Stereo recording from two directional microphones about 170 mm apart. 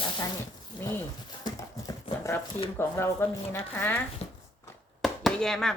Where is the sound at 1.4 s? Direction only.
20° left (ahead or behind).